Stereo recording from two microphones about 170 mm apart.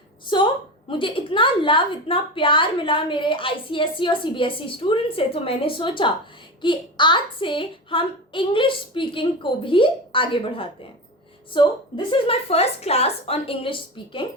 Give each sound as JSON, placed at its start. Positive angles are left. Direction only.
{"t": 0.3, "sound": "a woman's voice", "side_deg": 30}